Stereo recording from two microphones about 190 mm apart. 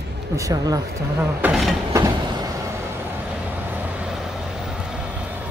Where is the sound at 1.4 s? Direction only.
Centre (ahead or behind).